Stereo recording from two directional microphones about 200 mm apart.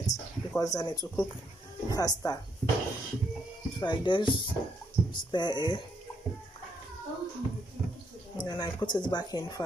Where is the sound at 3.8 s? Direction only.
25° left (ahead or behind).